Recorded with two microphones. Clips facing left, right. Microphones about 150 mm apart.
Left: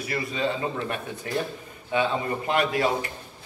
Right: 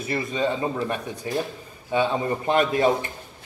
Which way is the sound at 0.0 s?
25° right (ahead or behind).